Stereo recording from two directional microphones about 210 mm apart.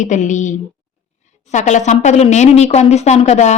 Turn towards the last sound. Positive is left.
turn(degrees=30)  # may be behind; listen again after turning